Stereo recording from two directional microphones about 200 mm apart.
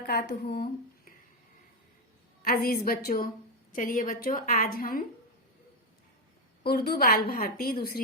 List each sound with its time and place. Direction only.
0.0 s speech: 50° left (ahead or behind)
2.4 s a woman's voice: 45° left (ahead or behind)
6.7 s a woman's voice: 50° left (ahead or behind)